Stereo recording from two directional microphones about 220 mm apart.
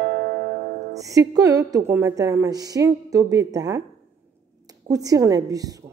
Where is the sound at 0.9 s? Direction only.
15° right (ahead or behind).